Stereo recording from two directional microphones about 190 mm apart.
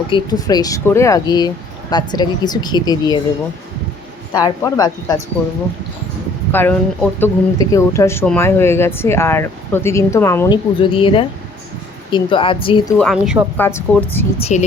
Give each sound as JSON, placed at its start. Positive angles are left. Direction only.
{"t": 0.1, "sound": "speech", "side_deg": 20}
{"t": 4.4, "sound": "speech", "side_deg": 20}
{"t": 6.5, "sound": "speech", "side_deg": 10}
{"t": 10.8, "sound": "speech", "side_deg": 25}
{"t": 13.0, "sound": "a woman's voice", "side_deg": 0}
{"t": 13.6, "sound": "speech", "side_deg": 10}
{"t": 14.3, "sound": "speech", "side_deg": 30}